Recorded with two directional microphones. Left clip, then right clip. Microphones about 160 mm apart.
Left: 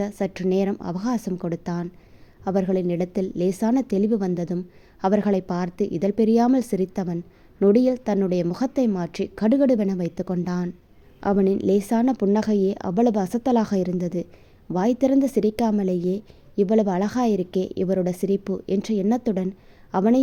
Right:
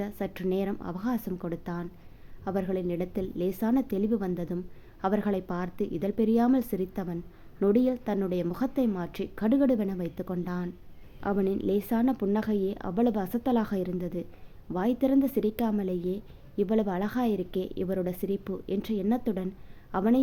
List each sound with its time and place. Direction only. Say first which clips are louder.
0.0 s a woman's voice: left 7 dB; 40° left (ahead or behind)